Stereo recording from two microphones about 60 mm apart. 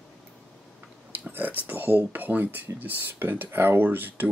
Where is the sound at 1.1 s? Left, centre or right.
Right.